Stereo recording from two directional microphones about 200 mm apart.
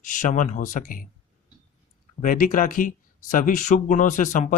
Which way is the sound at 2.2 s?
40° left (ahead or behind).